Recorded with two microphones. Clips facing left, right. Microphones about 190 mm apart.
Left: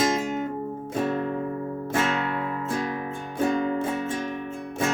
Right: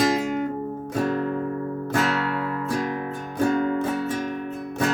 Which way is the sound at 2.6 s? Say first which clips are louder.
Right 2 dB; 25° left (ahead or behind).